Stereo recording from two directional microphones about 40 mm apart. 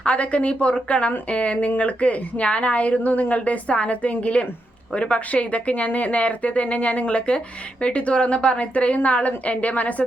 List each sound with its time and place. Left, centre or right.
0.0 s speech: left